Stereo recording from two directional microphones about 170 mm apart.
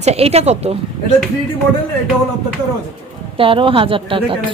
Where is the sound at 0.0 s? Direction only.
40° right (ahead or behind).